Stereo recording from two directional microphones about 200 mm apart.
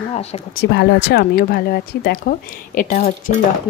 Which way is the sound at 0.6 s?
60° left (ahead or behind).